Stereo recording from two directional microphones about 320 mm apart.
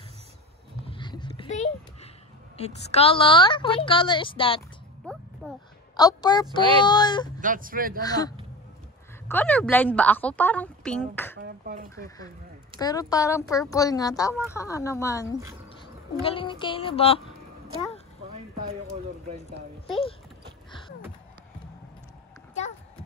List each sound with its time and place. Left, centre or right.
0.8 s a sound: centre
2.5 s a woman's voice: centre
5.9 s a woman's voice: centre
7.3 s speech: right
8.0 s a woman's voice: centre
9.3 s a woman's voice: centre
11.3 s speech: right
11.9 s a woman's voice: centre